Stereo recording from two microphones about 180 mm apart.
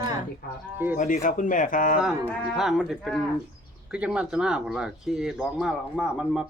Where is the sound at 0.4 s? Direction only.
55° left (ahead or behind).